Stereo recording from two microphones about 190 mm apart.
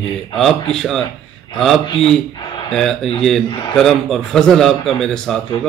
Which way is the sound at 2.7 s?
Centre (ahead or behind).